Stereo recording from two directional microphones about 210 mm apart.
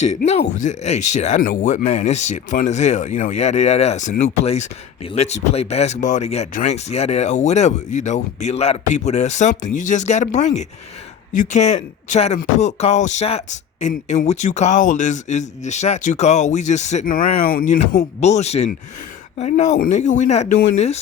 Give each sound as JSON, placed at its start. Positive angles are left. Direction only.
{"t": 0.0, "sound": "speech", "side_deg": 35}